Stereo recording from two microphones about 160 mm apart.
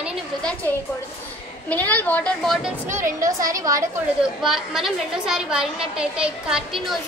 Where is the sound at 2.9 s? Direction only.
20° right (ahead or behind).